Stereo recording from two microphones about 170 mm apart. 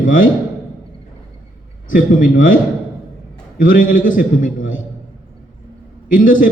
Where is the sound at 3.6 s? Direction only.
50° left (ahead or behind).